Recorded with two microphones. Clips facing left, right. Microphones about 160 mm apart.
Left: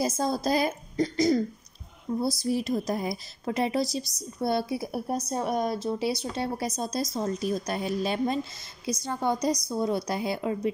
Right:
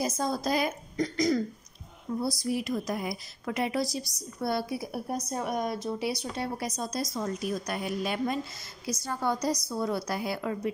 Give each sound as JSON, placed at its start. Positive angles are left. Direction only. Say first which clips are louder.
{"t": 0.0, "sound": "a woman's voice", "louder": "left 3 dB", "side_deg": 30}